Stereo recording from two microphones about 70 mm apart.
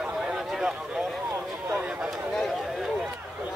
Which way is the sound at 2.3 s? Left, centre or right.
Centre.